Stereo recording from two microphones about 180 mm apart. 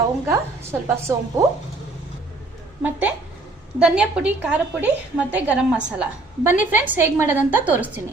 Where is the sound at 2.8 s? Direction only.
10° right (ahead or behind).